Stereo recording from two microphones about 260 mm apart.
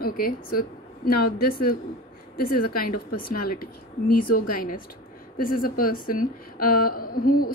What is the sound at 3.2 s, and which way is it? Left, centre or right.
A woman's voice, left.